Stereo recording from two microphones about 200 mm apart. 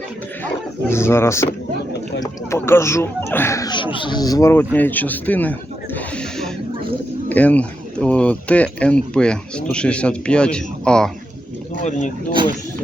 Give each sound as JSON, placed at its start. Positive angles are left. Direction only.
{"t": 0.9, "sound": "a man's voice", "side_deg": 10}
{"t": 11.8, "sound": "speech", "side_deg": 35}